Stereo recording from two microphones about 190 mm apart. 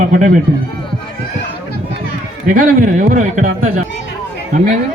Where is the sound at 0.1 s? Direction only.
45° right (ahead or behind).